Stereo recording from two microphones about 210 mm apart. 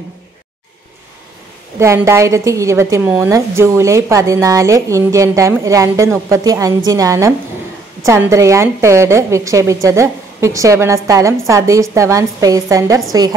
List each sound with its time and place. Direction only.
1.8 s a woman's voice: 15° right (ahead or behind)